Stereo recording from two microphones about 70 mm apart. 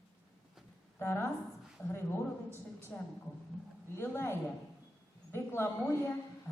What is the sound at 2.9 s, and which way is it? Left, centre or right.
Speech, centre.